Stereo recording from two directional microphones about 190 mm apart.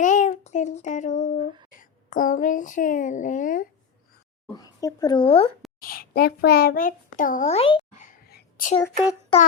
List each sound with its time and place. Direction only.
0.0 s child singing: 40° left (ahead or behind)
1.8 s a child's voice: 45° left (ahead or behind)
4.5 s speech: 20° left (ahead or behind)
5.8 s a child's voice: 50° left (ahead or behind); by 8.0 s 30° left (ahead or behind)
8.0 s whispering: 45° left (ahead or behind)
9.3 s speech: 25° left (ahead or behind)